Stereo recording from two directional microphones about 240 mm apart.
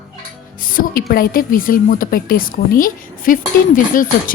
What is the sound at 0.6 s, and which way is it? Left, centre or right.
Music, left.